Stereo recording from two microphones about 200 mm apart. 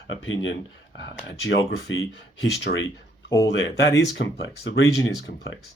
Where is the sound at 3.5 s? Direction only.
60° left (ahead or behind).